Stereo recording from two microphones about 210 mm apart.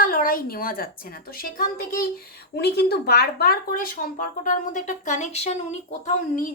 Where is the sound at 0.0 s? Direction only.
40° left (ahead or behind).